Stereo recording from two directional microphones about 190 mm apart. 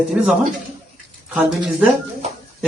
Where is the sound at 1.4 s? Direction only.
5° right (ahead or behind).